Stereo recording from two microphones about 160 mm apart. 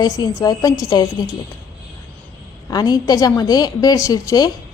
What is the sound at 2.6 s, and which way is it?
A woman's voice, 25° left (ahead or behind).